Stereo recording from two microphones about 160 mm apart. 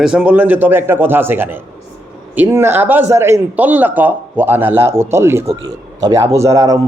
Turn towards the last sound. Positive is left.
turn(degrees=-20)  # may be behind; listen again after turning